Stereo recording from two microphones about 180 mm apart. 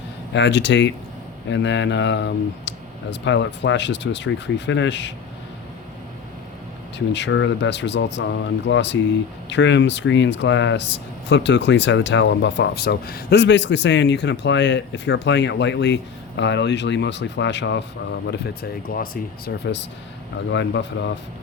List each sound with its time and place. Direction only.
0.3 s speech: 80° left
7.1 s speech: 85° left
18.9 s speech: 50° left (ahead or behind)
19.6 s speech: 75° left (ahead or behind)